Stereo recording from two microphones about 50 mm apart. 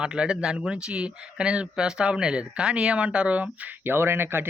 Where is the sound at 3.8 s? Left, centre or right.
Right.